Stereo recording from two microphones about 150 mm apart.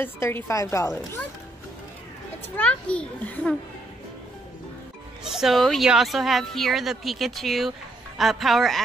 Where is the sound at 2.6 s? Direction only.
10° left (ahead or behind).